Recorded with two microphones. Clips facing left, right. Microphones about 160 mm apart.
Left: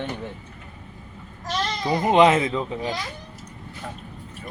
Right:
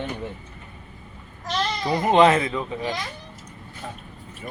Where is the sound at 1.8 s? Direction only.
20° left (ahead or behind).